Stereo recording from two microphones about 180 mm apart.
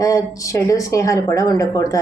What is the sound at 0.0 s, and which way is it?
A woman's voice, 15° left (ahead or behind).